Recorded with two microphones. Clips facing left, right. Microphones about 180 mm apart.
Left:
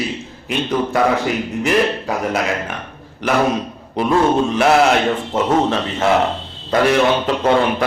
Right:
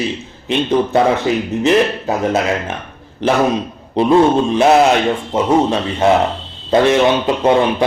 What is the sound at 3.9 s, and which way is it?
A man's voice, 20° right (ahead or behind).